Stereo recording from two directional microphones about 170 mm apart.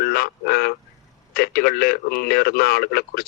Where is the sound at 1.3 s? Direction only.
65° left (ahead or behind).